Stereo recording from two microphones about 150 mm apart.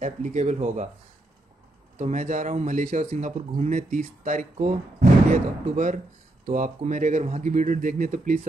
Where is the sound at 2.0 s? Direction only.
50° right (ahead or behind).